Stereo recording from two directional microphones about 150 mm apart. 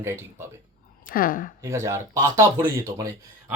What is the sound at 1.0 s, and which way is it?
Speech, 75° left (ahead or behind).